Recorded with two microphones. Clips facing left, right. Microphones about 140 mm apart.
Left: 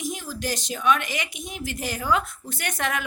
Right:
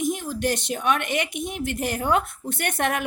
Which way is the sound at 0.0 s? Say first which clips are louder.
Right 6 dB; 55° right (ahead or behind).